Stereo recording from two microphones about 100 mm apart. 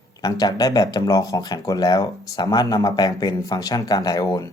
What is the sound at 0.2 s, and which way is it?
Speech, 40° left (ahead or behind).